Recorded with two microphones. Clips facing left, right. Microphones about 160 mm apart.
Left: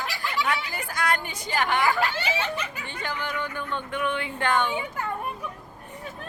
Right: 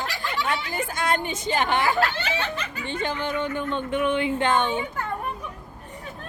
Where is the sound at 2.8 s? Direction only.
25° right (ahead or behind).